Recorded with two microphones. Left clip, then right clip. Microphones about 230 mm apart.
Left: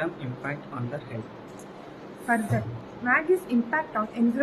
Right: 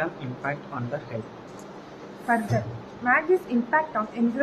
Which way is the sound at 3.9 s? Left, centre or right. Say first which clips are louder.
Right 1 dB; centre.